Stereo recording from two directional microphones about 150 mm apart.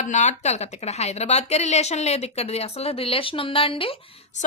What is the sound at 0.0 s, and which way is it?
Speech, 50° left (ahead or behind).